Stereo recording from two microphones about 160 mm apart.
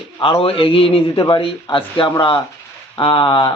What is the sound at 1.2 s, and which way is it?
Speech, 25° left (ahead or behind).